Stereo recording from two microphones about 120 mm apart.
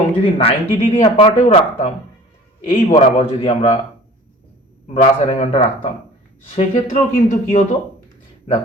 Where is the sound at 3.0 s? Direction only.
55° left (ahead or behind).